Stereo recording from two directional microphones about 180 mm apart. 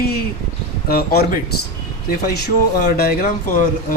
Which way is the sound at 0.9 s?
60° left (ahead or behind).